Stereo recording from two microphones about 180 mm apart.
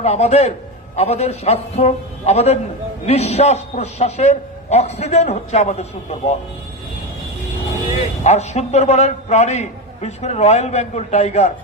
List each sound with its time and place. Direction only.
0.0 s a man's voice: 35° left (ahead or behind)
8.2 s a man's voice: 40° left (ahead or behind)